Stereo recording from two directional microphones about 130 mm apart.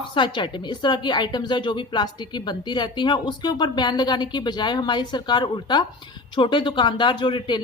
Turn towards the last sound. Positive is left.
turn(degrees=35)  # may be behind; listen again after turning